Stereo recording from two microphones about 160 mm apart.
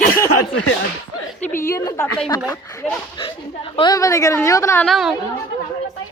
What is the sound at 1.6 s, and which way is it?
Speech, 20° left (ahead or behind).